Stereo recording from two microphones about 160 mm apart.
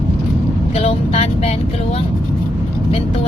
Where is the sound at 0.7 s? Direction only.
40° left (ahead or behind).